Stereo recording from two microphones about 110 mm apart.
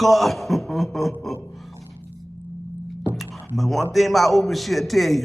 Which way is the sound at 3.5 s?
Centre (ahead or behind).